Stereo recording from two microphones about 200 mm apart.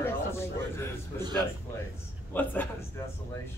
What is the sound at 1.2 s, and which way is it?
Speech, 20° right (ahead or behind).